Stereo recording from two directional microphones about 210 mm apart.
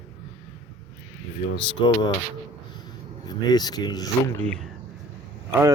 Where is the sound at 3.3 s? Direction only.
20° left (ahead or behind).